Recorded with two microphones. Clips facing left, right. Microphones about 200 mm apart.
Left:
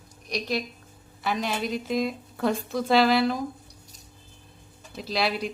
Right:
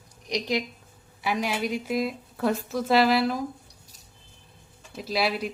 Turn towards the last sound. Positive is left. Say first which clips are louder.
# even
turn(degrees=-5)  # may be behind; listen again after turning